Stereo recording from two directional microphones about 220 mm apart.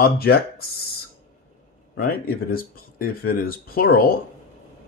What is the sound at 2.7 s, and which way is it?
Speech, 40° left (ahead or behind).